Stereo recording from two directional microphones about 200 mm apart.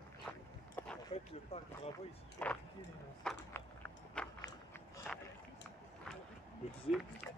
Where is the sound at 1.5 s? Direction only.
30° left (ahead or behind).